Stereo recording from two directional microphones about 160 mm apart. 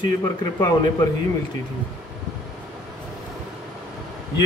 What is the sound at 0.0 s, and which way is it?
Speech, 25° left (ahead or behind).